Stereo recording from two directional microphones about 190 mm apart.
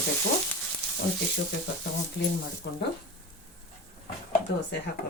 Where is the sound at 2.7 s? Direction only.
60° left (ahead or behind).